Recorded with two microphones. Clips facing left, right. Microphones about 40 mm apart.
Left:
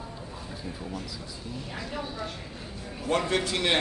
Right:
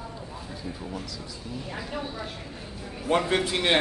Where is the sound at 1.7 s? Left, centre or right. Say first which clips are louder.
Right 2 dB; centre.